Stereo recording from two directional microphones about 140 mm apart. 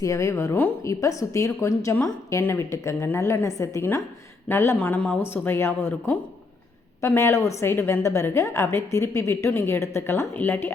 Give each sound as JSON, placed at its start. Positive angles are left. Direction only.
{"t": 0.0, "sound": "a woman's voice", "side_deg": 20}